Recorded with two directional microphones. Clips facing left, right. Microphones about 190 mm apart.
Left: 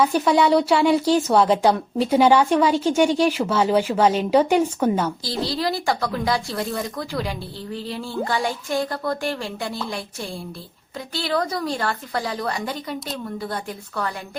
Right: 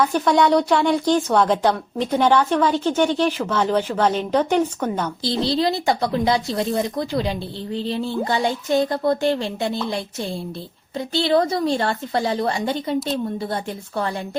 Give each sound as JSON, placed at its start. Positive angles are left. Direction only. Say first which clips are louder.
{"t": 0.0, "sound": "a woman's voice", "louder": "even", "side_deg": 5}
{"t": 5.2, "sound": "a woman's voice", "louder": "right 4 dB", "side_deg": -25}